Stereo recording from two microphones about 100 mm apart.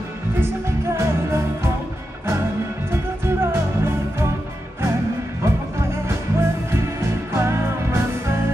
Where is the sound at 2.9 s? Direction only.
25° right (ahead or behind).